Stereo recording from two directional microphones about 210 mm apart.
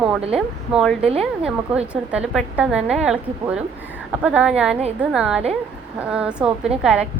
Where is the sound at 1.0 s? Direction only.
30° right (ahead or behind).